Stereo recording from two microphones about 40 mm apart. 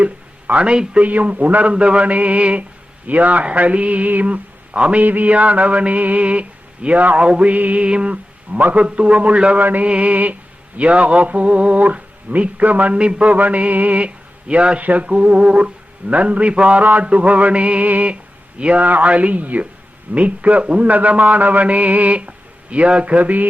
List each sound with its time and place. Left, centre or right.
0.0 s a sound: right
0.9 s speech: right
1.7 s speech: right
5.0 s speech: right
7.2 s music: right
7.5 s speech: right
9.6 s mantra: right
9.8 s speech: right
14.8 s mantra: right
15.0 s speech: right